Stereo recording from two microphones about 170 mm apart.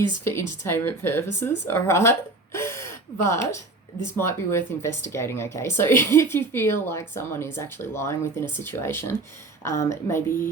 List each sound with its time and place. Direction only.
0.3 s speech: 15° left (ahead or behind)